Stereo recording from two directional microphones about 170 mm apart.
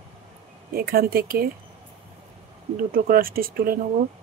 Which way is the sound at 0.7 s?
60° right (ahead or behind).